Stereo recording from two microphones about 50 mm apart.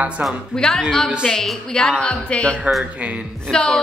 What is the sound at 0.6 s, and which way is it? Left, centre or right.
Speech, centre.